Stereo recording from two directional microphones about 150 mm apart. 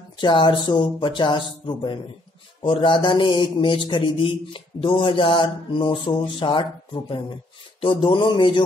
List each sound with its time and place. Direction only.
0.2 s a man's voice: 30° left (ahead or behind)